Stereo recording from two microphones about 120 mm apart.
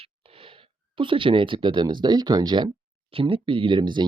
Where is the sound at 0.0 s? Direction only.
55° right (ahead or behind); by 2.7 s 35° right (ahead or behind).